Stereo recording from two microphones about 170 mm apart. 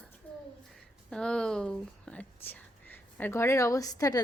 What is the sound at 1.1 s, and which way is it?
A child's voice, 5° left (ahead or behind).